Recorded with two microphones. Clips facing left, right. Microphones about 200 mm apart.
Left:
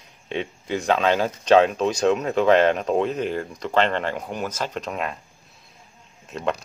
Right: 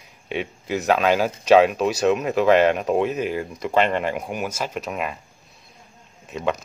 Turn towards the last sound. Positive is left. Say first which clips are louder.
# right 1 dB
turn(degrees=-5)  # may be behind; listen again after turning